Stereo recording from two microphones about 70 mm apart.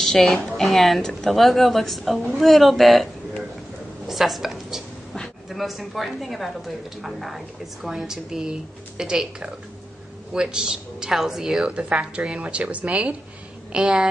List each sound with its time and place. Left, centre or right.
0.0 s a woman's voice: centre